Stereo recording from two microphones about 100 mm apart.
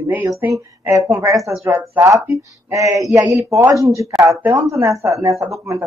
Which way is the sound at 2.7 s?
35° right (ahead or behind).